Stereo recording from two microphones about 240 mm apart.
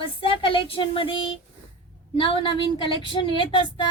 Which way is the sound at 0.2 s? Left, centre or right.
Left.